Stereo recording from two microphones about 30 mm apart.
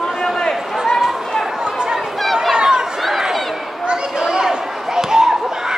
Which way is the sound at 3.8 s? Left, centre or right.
Right.